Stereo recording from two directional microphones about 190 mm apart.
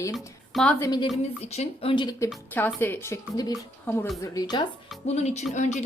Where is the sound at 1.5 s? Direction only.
30° left (ahead or behind).